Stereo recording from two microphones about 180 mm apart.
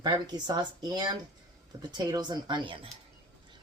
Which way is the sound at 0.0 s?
25° right (ahead or behind).